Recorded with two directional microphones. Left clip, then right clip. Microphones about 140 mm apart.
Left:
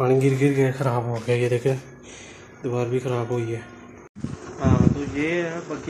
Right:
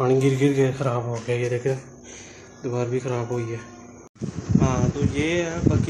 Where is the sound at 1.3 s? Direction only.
45° left (ahead or behind).